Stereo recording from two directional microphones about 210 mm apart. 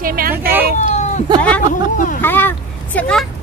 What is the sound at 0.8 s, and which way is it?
Cat, 35° left (ahead or behind).